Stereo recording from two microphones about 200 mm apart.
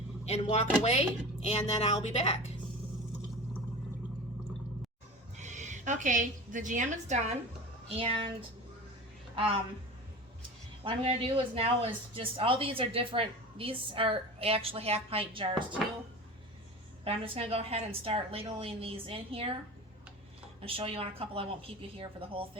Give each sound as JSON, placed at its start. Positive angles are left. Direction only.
{"t": 0.3, "sound": "a woman's voice", "side_deg": 30}
{"t": 5.4, "sound": "a woman's voice", "side_deg": -35}
{"t": 10.8, "sound": "speech", "side_deg": -25}
{"t": 17.0, "sound": "speech", "side_deg": -30}
{"t": 20.6, "sound": "speech", "side_deg": -30}